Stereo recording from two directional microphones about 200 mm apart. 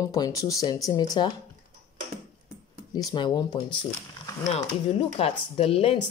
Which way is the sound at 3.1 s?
20° left (ahead or behind).